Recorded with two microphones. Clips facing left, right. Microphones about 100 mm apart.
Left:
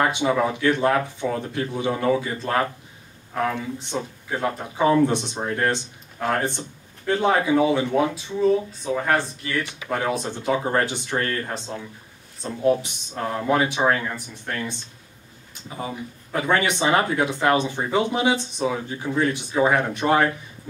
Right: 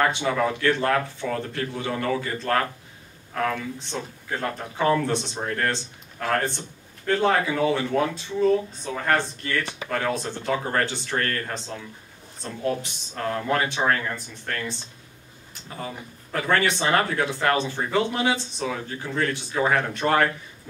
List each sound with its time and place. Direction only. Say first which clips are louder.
0.0 s speech: left 2 dB; 15° left (ahead or behind)
15.8 s speech: left 4 dB; 15° left (ahead or behind)